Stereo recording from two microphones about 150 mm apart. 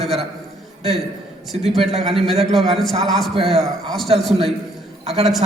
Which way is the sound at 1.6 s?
45° right (ahead or behind).